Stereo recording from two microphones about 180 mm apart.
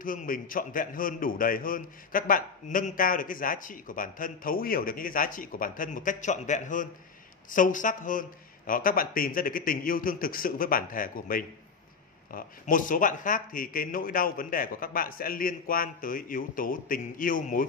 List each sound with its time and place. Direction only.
0.0 s a man's voice: 50° left (ahead or behind)